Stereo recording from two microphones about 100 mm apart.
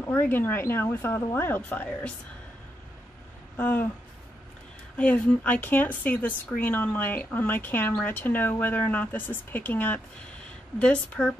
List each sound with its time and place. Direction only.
0.0 s speech: 20° left (ahead or behind)
3.5 s speech: 20° left (ahead or behind)
4.9 s a woman's voice: 15° left (ahead or behind)